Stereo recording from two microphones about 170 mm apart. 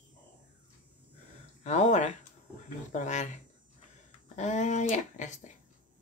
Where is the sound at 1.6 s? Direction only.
40° left (ahead or behind).